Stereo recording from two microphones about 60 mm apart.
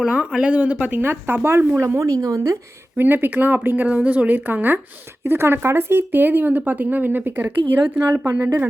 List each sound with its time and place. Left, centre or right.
0.0 s speech: centre
1.0 s speech: right
1.8 s speech: right
3.0 s speech: right